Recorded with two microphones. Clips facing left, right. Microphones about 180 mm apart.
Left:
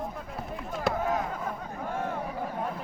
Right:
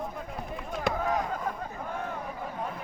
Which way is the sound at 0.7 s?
5° left (ahead or behind).